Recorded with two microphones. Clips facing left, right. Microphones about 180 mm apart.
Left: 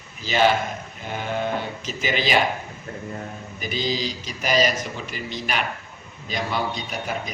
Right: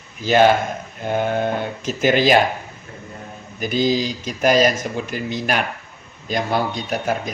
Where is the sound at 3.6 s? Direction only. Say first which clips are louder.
Right 7 dB; 50° right (ahead or behind).